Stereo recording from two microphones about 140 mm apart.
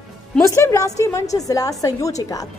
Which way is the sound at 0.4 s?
20° left (ahead or behind).